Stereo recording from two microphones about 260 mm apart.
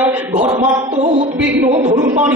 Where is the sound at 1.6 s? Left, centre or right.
Centre.